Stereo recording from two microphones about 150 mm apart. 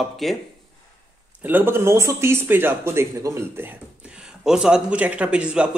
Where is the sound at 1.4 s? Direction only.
15° right (ahead or behind).